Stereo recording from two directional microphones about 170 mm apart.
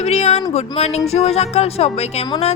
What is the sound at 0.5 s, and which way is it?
Speech, 40° left (ahead or behind).